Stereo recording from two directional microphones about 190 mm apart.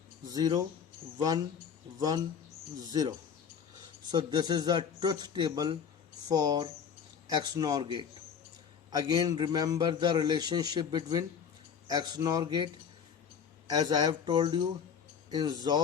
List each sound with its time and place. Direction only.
0.3 s a man's voice: 20° right (ahead or behind)
2.0 s a man's voice: 20° right (ahead or behind)
13.7 s a man's voice: 20° right (ahead or behind)